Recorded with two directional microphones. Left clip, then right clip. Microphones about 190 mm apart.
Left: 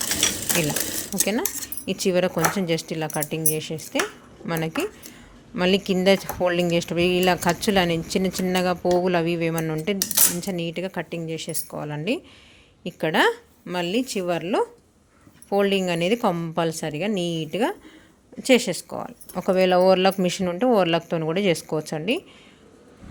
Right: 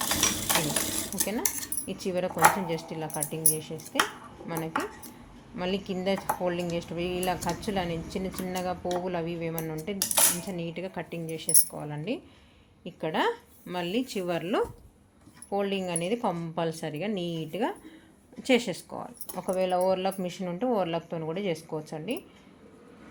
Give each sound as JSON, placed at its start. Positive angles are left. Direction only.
{"t": 1.2, "sound": "a woman's voice", "side_deg": 50}
{"t": 15.4, "sound": "a woman's voice", "side_deg": 50}